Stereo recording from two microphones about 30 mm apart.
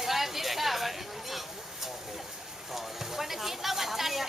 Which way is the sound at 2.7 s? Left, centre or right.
Centre.